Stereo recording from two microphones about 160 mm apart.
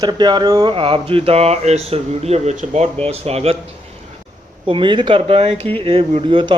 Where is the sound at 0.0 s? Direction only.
25° right (ahead or behind).